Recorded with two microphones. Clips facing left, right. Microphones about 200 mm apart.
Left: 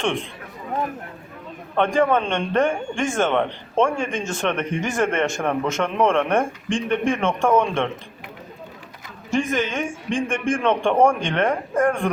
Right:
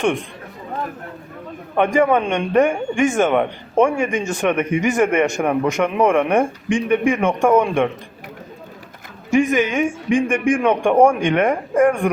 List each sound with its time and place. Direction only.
1.7 s a man's voice: 15° right (ahead or behind)
9.3 s a man's voice: 15° right (ahead or behind)